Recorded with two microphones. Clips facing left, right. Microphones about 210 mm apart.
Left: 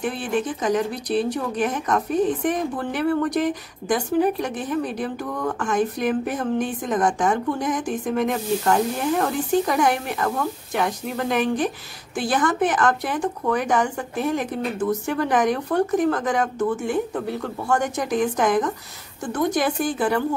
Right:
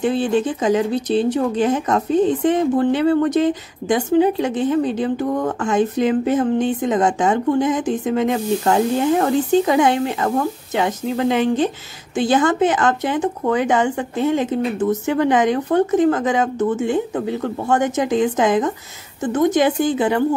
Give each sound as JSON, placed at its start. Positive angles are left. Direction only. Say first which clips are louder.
{"t": 0.0, "sound": "speech", "louder": "right 7 dB", "side_deg": -25}
{"t": 9.5, "sound": "speech", "louder": "right 3 dB", "side_deg": -25}